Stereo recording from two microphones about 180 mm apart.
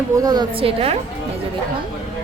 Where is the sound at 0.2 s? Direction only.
20° right (ahead or behind).